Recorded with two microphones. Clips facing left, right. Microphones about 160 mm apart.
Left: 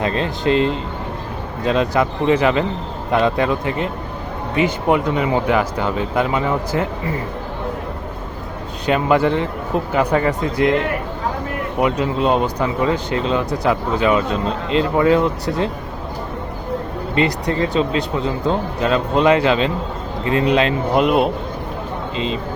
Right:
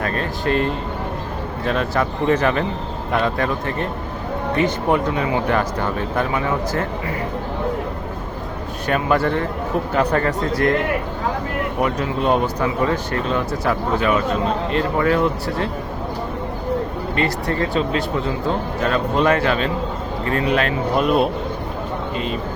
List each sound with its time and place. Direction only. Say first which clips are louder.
0.0 s speech: left 3 dB; 20° left (ahead or behind)
8.9 s speech: left 3 dB; 15° left (ahead or behind)
11.8 s speech: left 4 dB; 15° left (ahead or behind)
17.2 s speech: left 3 dB; 15° left (ahead or behind)